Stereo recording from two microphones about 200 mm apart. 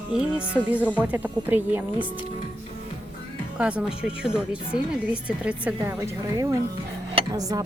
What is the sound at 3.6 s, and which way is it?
A woman's voice, 5° right (ahead or behind).